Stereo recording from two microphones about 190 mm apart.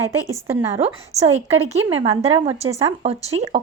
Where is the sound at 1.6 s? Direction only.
30° right (ahead or behind).